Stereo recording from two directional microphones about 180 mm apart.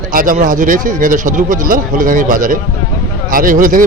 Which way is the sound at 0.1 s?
50° right (ahead or behind).